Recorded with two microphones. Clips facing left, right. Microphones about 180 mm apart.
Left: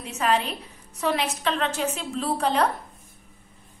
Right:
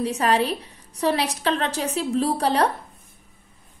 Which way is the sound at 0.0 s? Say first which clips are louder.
Right 4 dB; 35° right (ahead or behind).